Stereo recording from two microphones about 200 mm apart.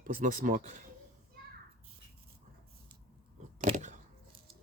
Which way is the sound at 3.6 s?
35° right (ahead or behind).